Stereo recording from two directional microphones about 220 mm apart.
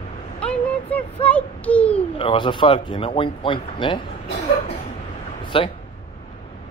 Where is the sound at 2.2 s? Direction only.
25° left (ahead or behind).